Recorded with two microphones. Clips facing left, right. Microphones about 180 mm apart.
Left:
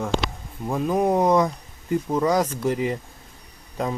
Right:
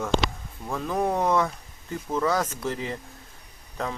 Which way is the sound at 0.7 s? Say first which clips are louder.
Left 5 dB; 15° left (ahead or behind).